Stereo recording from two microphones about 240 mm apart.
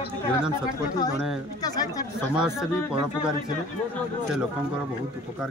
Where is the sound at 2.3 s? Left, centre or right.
Centre.